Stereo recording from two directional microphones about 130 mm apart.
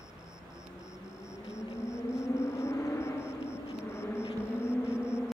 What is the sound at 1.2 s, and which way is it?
Vehicle, 20° left (ahead or behind).